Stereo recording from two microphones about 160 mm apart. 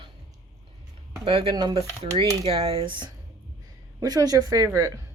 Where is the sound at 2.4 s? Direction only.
40° right (ahead or behind); by 4.9 s 20° right (ahead or behind).